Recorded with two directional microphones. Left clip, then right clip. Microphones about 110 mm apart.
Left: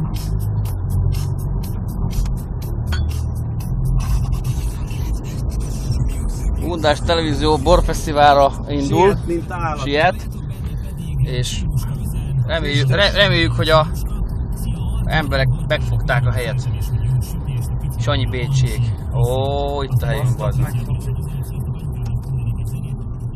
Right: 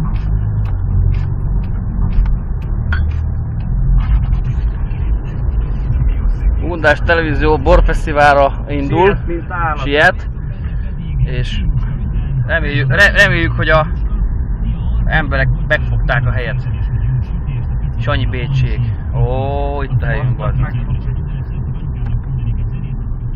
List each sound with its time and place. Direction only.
6.7 s speech: 15° left (ahead or behind)
9.5 s speech: 45° left (ahead or behind)
9.8 s speech: 5° left (ahead or behind)
12.4 s a man's voice: 20° left (ahead or behind)
15.0 s speech: 15° left (ahead or behind)
18.0 s a man's voice: 15° left (ahead or behind)